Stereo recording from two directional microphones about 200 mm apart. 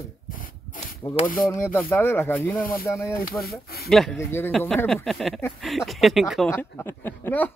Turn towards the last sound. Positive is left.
turn(degrees=10)  # may be behind; listen again after turning